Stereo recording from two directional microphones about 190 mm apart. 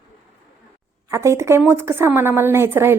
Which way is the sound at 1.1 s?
15° right (ahead or behind).